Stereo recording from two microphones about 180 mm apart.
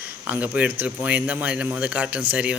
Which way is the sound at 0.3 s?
10° right (ahead or behind).